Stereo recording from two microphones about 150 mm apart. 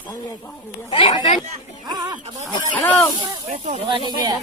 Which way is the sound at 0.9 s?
35° left (ahead or behind).